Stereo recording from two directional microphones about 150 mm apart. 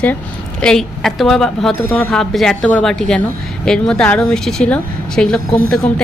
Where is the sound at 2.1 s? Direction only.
5° left (ahead or behind).